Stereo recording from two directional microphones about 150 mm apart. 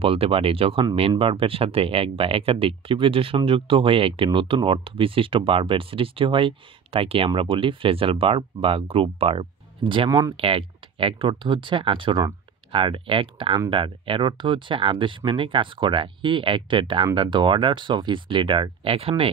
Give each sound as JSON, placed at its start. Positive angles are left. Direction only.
{"t": 0.0, "sound": "speech", "side_deg": -40}
{"t": 10.3, "sound": "speech", "side_deg": -40}